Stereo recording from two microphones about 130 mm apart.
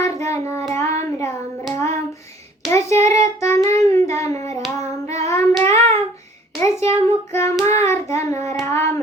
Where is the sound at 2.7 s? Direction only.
20° left (ahead or behind).